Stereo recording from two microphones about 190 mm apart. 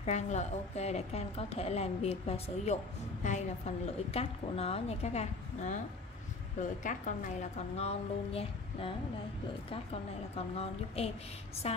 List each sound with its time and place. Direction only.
0.0 s a woman's voice: 35° left (ahead or behind)
6.8 s a woman's voice: 40° left (ahead or behind)
10.3 s a woman's voice: 30° left (ahead or behind)